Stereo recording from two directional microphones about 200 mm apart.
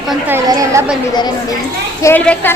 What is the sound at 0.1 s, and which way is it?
Speech, 10° right (ahead or behind).